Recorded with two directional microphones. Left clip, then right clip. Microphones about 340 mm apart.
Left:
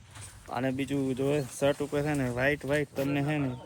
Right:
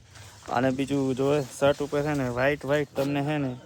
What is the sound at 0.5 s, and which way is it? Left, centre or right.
Speech, centre.